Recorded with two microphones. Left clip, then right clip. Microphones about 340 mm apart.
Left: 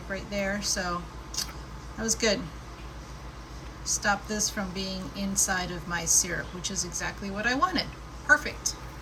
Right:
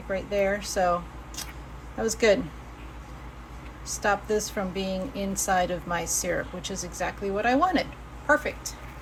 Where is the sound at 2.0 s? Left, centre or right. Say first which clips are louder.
Right 5 dB; centre.